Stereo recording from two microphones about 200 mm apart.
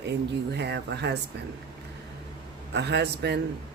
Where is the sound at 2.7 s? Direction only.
55° right (ahead or behind).